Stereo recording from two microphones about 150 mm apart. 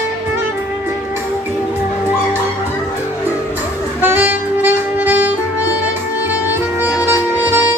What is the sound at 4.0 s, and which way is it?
Saxophone, 10° right (ahead or behind).